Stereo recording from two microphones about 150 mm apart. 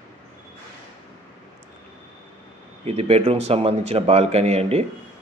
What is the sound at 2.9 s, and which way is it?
A man's voice, 45° right (ahead or behind).